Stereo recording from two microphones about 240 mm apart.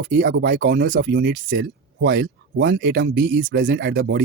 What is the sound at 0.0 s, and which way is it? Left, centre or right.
Speech, right.